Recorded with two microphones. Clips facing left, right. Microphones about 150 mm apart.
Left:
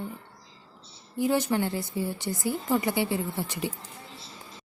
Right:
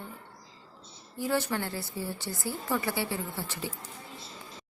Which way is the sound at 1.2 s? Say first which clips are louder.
Left 5 dB; 15° left (ahead or behind).